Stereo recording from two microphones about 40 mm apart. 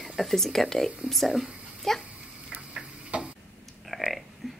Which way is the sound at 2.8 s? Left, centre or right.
Right.